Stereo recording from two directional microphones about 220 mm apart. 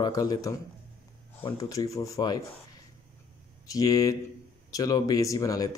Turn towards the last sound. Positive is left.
turn(degrees=15)  # may be behind; listen again after turning